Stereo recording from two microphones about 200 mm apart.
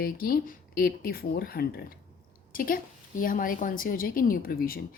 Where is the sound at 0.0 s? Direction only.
45° left (ahead or behind).